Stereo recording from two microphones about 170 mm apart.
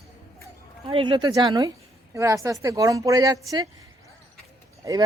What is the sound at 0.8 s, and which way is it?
Speech, 30° right (ahead or behind).